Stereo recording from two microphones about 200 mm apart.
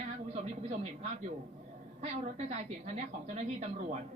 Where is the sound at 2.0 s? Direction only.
35° right (ahead or behind).